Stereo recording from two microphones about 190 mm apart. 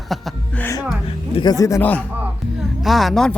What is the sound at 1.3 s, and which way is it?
Speech, 20° left (ahead or behind).